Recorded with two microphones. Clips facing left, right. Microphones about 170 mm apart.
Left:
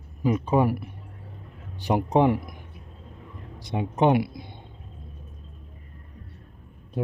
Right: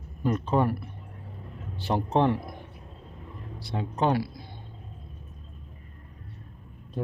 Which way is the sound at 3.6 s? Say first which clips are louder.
Left 5 dB; 20° left (ahead or behind).